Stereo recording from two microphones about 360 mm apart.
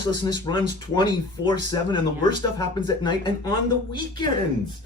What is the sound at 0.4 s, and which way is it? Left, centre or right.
Speech, centre.